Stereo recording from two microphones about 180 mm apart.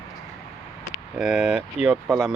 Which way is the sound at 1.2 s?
Centre (ahead or behind).